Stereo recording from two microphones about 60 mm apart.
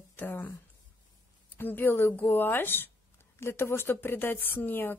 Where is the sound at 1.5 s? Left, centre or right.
Left.